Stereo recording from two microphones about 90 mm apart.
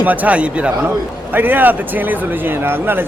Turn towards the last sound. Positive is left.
turn(degrees=-25)  # may be behind; listen again after turning